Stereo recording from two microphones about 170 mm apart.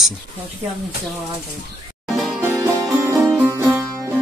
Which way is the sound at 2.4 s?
15° right (ahead or behind).